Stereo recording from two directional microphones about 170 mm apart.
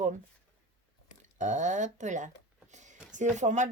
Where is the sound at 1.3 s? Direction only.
45° right (ahead or behind).